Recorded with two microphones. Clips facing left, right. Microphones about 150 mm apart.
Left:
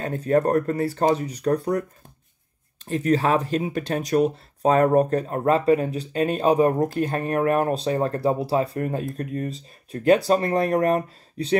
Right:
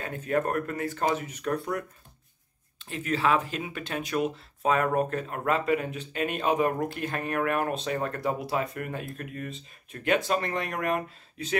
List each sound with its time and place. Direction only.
0.0 s speech: 35° left (ahead or behind)